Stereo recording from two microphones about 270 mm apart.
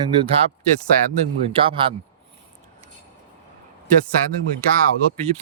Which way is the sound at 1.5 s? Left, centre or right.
Centre.